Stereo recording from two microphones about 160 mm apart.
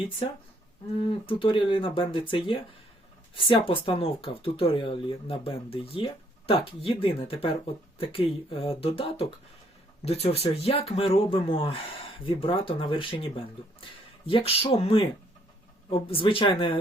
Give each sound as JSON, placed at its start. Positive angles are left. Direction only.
{"t": 0.9, "sound": "speech", "side_deg": 35}